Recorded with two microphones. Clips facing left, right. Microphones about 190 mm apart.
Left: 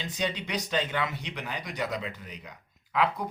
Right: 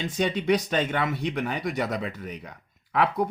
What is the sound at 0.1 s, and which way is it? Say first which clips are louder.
Speech: right 9 dB; 55° right (ahead or behind).